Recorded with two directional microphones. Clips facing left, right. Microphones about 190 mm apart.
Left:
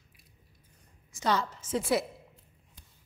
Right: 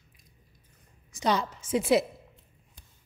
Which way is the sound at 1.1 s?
15° right (ahead or behind).